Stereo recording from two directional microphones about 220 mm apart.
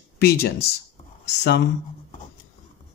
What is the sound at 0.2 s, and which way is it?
Speech, 45° left (ahead or behind).